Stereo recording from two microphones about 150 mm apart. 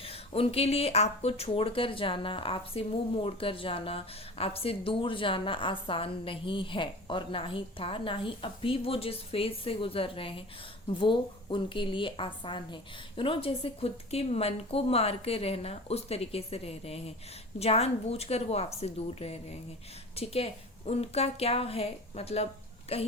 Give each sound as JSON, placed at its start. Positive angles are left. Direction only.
{"t": 0.0, "sound": "a woman's voice", "side_deg": 40}